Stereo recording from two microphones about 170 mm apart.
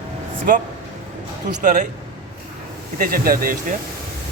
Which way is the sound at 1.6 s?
50° right (ahead or behind).